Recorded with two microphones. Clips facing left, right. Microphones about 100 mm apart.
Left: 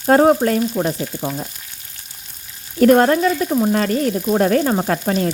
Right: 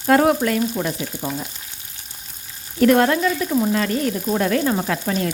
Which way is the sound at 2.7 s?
35° left (ahead or behind).